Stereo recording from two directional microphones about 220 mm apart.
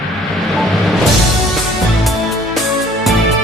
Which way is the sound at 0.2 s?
Centre (ahead or behind).